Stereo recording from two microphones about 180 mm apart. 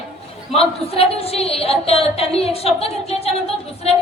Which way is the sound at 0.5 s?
35° left (ahead or behind).